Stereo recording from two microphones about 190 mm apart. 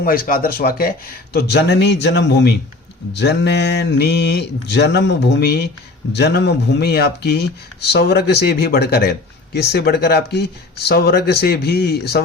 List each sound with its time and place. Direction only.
0.0 s speech: 50° left (ahead or behind)